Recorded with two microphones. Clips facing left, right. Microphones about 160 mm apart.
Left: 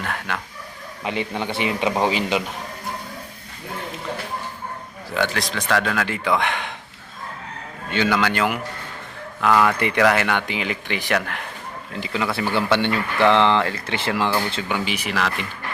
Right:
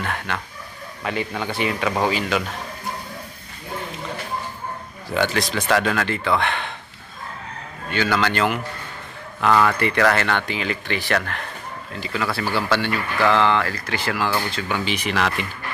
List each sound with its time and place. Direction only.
0.0 s speech: centre (ahead or behind)
1.0 s speech: 20° left (ahead or behind)
5.1 s speech: centre (ahead or behind)
6.1 s speech: 10° left (ahead or behind)
7.9 s speech: 20° left (ahead or behind)
14.5 s speech: 15° left (ahead or behind)